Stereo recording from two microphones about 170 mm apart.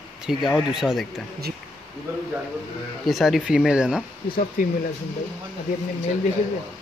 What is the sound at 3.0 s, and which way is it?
Speech, centre (ahead or behind).